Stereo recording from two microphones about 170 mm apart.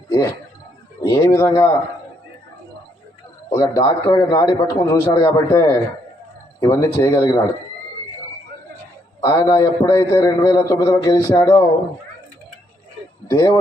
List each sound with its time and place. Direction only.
1.0 s a man's voice: 20° left (ahead or behind)
3.5 s a man's voice: 25° left (ahead or behind)
9.2 s a man's voice: 20° left (ahead or behind)
13.3 s a man's voice: 25° left (ahead or behind)